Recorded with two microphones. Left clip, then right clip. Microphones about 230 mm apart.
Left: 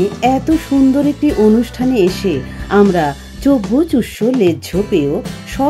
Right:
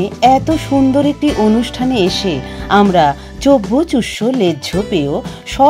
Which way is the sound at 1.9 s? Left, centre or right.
Right.